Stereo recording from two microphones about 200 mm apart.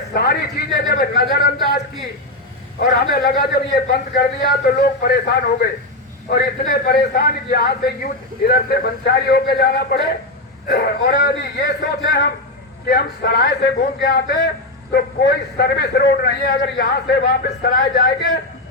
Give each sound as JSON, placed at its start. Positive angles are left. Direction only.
{"t": 0.1, "sound": "a man's voice", "side_deg": 50}
{"t": 2.8, "sound": "a man's voice", "side_deg": 50}